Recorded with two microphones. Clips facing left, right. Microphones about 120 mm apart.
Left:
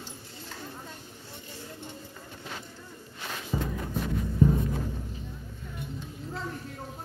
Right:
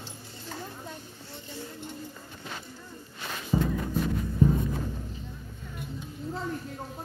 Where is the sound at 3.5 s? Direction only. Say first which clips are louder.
Right 5 dB; 15° right (ahead or behind).